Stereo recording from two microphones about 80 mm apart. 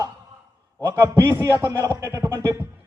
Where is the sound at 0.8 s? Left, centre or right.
Right.